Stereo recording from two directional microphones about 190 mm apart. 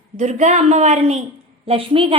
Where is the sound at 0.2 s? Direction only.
35° right (ahead or behind).